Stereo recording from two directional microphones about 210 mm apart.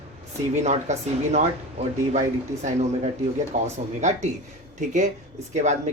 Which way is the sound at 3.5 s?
35° right (ahead or behind).